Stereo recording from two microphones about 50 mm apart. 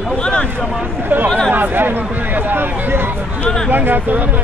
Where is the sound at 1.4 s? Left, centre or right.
Right.